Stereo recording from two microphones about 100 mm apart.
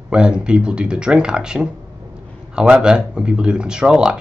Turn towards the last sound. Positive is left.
turn(degrees=-10)  # may be behind; listen again after turning